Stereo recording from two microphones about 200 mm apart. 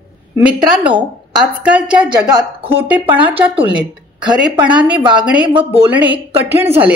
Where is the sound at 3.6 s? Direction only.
20° right (ahead or behind).